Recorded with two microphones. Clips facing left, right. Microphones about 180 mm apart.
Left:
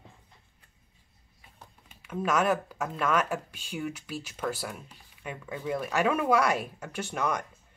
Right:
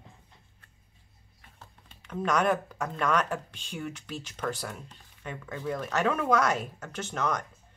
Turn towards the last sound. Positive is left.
turn(degrees=10)  # may be behind; listen again after turning